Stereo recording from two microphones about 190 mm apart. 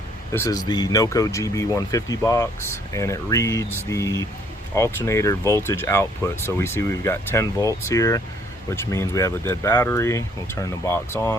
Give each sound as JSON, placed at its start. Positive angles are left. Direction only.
{"t": 0.3, "sound": "speech", "side_deg": 20}